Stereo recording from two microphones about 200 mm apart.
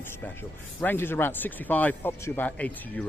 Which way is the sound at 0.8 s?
10° left (ahead or behind).